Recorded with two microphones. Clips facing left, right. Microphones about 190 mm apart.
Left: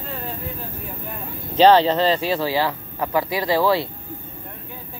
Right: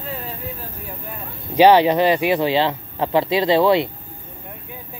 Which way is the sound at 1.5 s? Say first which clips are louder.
Right 2 dB; 10° right (ahead or behind).